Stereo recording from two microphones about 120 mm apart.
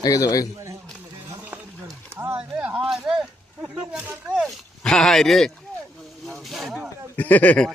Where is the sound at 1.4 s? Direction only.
15° right (ahead or behind).